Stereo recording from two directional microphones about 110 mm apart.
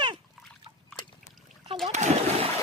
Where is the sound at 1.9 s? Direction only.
90° right.